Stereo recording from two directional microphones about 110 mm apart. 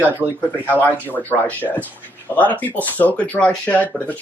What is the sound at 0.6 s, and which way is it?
Speech, 15° left (ahead or behind).